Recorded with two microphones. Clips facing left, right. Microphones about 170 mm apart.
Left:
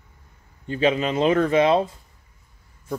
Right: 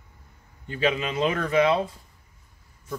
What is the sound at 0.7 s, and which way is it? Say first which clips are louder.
Speech: left 4 dB; 30° left (ahead or behind).